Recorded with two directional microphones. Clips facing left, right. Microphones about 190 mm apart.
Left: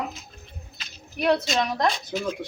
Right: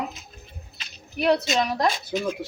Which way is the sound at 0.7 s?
5° right (ahead or behind).